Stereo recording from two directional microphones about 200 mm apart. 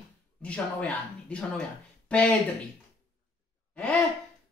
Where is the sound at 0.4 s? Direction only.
5° left (ahead or behind).